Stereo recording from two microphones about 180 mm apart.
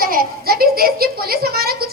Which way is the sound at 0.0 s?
55° right (ahead or behind).